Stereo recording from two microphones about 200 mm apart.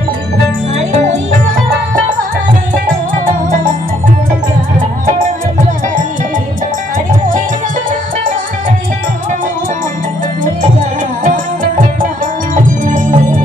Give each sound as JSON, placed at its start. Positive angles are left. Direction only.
{"t": 11.2, "sound": "music", "side_deg": -45}